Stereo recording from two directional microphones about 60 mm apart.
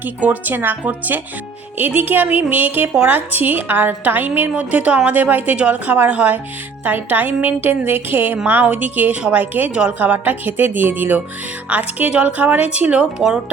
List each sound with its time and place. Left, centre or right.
0.0 s a woman's voice: right
4.5 s a woman's voice: right